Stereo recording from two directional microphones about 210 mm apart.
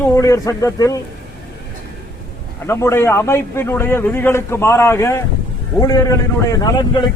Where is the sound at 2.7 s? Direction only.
15° left (ahead or behind).